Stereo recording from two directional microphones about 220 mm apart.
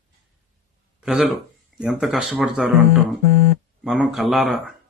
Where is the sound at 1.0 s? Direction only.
5° right (ahead or behind).